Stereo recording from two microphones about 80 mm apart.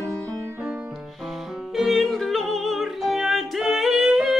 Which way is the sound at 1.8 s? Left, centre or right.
Centre.